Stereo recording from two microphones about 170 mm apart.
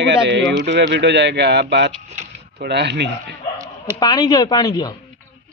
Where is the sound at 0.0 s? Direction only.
90° right.